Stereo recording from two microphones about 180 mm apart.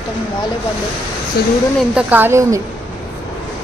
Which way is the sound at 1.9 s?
10° right (ahead or behind).